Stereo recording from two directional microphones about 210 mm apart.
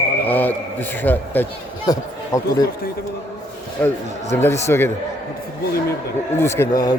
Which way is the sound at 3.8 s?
5° left (ahead or behind).